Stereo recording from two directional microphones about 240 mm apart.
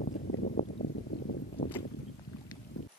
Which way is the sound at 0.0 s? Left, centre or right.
Left.